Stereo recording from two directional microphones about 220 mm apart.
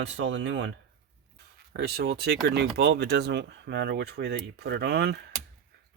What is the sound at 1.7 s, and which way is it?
Speech, 45° right (ahead or behind).